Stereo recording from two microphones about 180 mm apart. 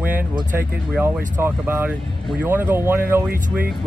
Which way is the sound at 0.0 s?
10° right (ahead or behind).